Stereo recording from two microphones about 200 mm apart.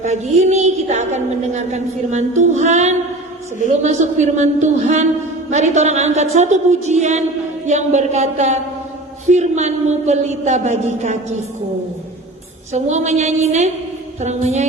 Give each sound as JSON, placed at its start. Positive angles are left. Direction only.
{"t": 0.0, "sound": "a woman's voice", "side_deg": -35}
{"t": 12.7, "sound": "a woman's voice", "side_deg": -35}